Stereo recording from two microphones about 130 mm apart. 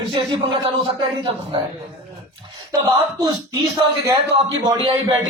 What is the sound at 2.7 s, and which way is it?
Speech, 25° right (ahead or behind).